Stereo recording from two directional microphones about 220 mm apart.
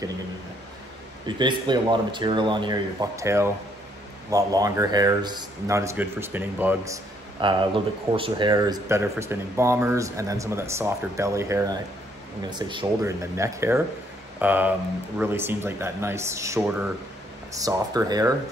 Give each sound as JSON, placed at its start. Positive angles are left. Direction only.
{"t": 1.2, "sound": "speech", "side_deg": -20}